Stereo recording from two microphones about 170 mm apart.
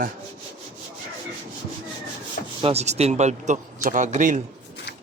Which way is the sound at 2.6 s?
35° right (ahead or behind).